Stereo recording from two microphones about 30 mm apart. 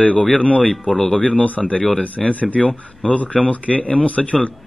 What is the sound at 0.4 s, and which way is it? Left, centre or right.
Speech, left.